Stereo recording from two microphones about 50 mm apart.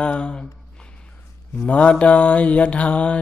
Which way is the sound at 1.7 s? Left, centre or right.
Left.